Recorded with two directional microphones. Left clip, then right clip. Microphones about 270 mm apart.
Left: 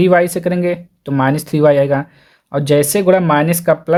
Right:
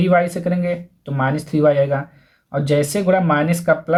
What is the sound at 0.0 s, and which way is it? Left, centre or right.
Speech, left.